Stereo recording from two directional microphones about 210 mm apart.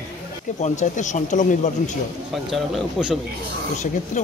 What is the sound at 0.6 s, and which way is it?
Speech, 35° left (ahead or behind).